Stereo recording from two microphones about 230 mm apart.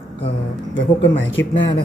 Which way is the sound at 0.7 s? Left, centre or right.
Left.